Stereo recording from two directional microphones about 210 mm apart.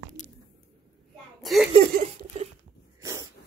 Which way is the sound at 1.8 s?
40° right (ahead or behind).